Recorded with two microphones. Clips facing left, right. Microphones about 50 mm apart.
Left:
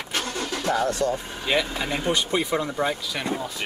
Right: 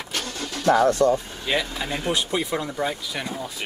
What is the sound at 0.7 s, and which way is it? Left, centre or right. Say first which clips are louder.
Speech: right 6 dB; right.